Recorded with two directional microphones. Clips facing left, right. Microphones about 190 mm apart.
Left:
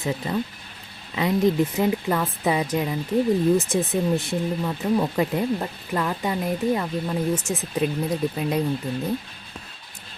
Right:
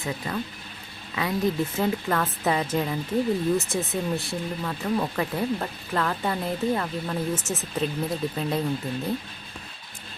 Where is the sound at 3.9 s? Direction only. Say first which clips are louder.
Left 5 dB; 20° left (ahead or behind).